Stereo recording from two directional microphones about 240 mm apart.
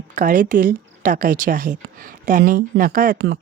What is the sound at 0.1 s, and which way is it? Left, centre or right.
Speech, right.